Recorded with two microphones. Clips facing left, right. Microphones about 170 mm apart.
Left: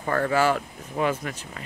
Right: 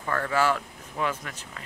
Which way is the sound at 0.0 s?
30° left (ahead or behind).